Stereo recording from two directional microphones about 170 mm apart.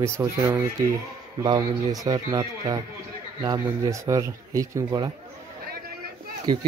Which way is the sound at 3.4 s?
20° right (ahead or behind).